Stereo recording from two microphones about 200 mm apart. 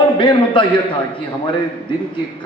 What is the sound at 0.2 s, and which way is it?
Speech, 25° left (ahead or behind).